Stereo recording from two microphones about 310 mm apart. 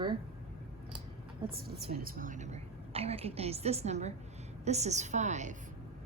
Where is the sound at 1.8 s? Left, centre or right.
Right.